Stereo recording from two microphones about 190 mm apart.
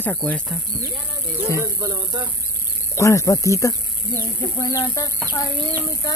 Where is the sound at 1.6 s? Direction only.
15° right (ahead or behind).